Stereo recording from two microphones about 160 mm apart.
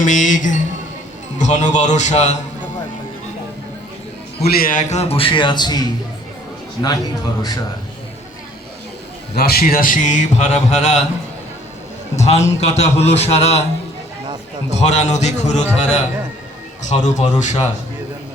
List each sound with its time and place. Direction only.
0.0 s speech: 50° left (ahead or behind)
4.4 s a man's voice: 70° left (ahead or behind); by 5.8 s 25° left (ahead or behind)
6.8 s a man's voice: 25° left (ahead or behind)
9.3 s speech: 75° left (ahead or behind); by 11.0 s 45° left (ahead or behind)
12.1 s speech: 45° left (ahead or behind)
14.7 s speech: 45° left (ahead or behind)